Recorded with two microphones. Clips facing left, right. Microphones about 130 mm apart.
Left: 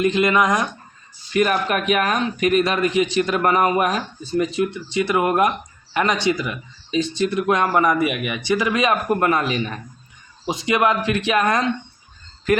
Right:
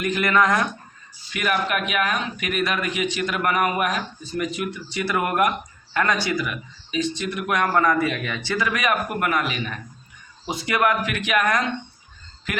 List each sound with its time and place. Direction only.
0.0 s speech: 20° left (ahead or behind)
1.3 s speech: 35° left (ahead or behind)
10.4 s speech: 20° left (ahead or behind)